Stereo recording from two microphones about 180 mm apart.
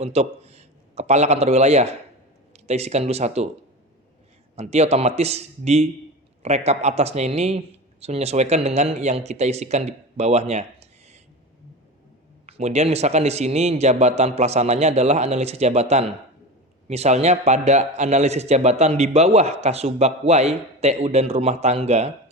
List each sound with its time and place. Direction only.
0.0 s a man's voice: 35° right (ahead or behind)
4.5 s a man's voice: 35° right (ahead or behind)
12.5 s a man's voice: 35° right (ahead or behind)